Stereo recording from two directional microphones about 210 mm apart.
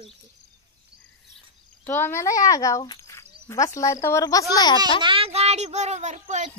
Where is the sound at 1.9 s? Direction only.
10° left (ahead or behind).